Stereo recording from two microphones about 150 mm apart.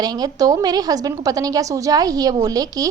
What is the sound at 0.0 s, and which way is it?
A woman's voice, 25° right (ahead or behind).